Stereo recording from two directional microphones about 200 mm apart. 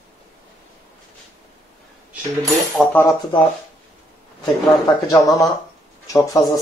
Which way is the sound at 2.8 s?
5° left (ahead or behind).